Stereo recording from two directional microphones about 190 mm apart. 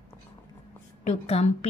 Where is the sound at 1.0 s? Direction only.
35° left (ahead or behind).